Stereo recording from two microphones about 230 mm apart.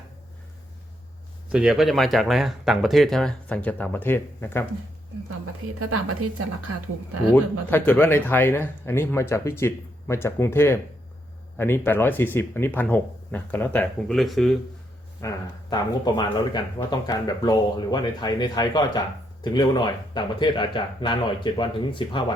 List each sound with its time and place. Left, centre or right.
1.5 s speech: centre
5.8 s a woman's voice: right
7.7 s speech: centre
15.2 s speech: centre